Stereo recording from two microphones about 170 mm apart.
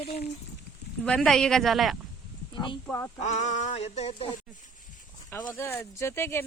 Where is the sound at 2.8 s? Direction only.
15° left (ahead or behind).